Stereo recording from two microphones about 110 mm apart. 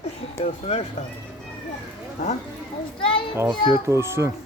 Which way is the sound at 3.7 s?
25° right (ahead or behind).